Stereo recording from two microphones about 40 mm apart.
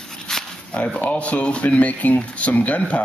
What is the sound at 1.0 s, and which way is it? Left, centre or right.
Speech, left.